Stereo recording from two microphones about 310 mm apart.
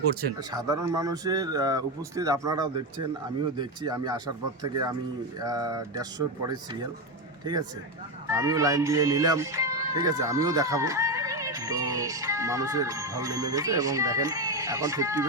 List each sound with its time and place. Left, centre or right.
0.5 s speech: centre
8.3 s speech: centre